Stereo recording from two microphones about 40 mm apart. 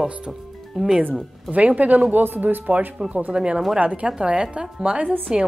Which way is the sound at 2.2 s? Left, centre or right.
Right.